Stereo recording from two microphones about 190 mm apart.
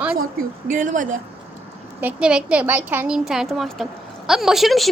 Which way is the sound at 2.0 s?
5° right (ahead or behind).